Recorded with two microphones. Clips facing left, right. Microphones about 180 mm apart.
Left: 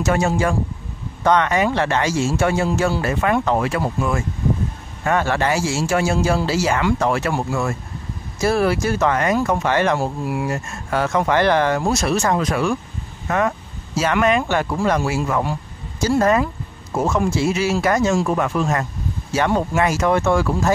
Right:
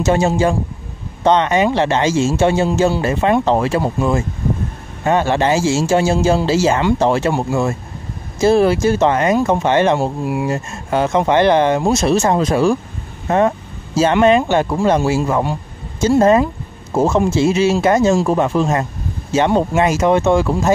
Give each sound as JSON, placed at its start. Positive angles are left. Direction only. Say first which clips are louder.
{"t": 0.0, "sound": "speech", "louder": "right 4 dB", "side_deg": -25}